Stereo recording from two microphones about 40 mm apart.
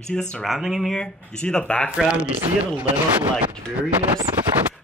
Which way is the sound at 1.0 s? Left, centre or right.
Left.